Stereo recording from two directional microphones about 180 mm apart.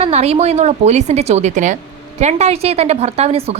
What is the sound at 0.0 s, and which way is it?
A woman's voice, 35° right (ahead or behind).